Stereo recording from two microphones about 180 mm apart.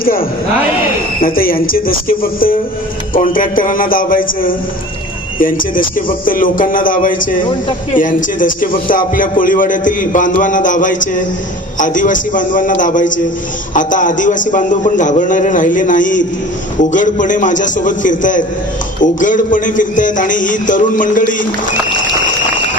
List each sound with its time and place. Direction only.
0.0 s a man's voice: 55° left (ahead or behind)
5.7 s a man's voice: 50° left (ahead or behind)